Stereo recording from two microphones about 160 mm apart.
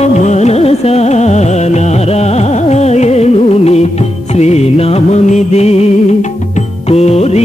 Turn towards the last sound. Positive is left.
turn(degrees=45)  # may be behind; listen again after turning